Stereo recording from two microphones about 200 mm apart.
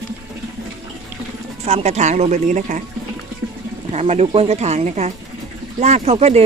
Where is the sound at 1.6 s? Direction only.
35° right (ahead or behind).